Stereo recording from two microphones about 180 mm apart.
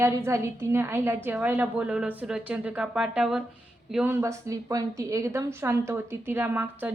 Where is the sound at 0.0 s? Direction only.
15° right (ahead or behind).